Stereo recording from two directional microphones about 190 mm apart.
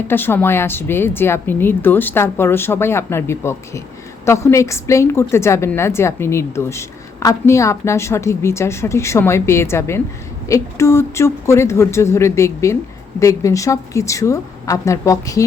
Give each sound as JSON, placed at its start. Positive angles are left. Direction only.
{"t": 0.1, "sound": "a woman's voice", "side_deg": 10}